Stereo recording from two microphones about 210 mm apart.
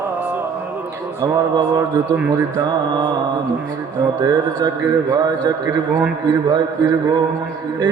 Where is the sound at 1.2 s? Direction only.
15° right (ahead or behind).